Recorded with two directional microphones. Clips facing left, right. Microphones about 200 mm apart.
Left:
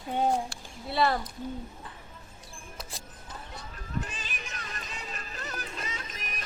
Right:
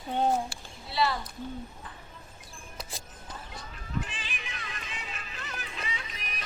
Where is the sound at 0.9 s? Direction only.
50° left (ahead or behind).